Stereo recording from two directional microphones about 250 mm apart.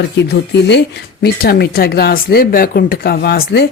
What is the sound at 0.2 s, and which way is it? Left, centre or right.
Speech, left.